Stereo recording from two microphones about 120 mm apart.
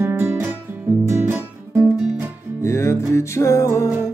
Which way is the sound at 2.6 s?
25° left (ahead or behind).